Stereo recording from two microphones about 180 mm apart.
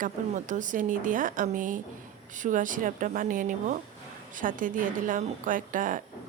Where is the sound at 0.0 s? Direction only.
45° right (ahead or behind).